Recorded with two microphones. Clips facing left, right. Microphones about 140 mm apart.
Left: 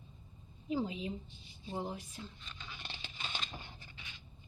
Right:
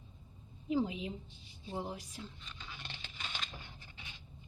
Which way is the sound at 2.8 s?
15° left (ahead or behind).